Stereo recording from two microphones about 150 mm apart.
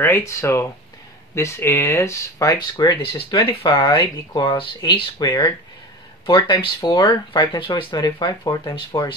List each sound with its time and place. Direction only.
0.0 s speech: 15° left (ahead or behind); by 5.0 s 35° left (ahead or behind)
5.2 s speech: 25° left (ahead or behind)